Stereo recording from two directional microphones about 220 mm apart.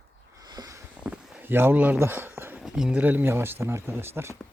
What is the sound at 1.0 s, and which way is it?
Speech, 5° right (ahead or behind).